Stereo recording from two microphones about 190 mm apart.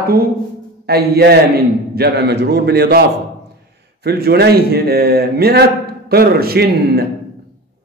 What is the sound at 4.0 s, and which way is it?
A man's voice, 55° right (ahead or behind).